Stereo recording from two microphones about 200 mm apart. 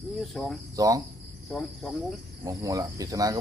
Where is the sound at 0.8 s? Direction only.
15° right (ahead or behind).